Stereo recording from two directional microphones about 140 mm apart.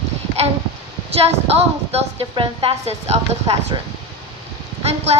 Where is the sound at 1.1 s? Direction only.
45° right (ahead or behind).